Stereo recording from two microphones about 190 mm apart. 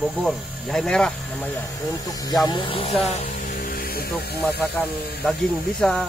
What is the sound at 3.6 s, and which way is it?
Snake, 50° left (ahead or behind).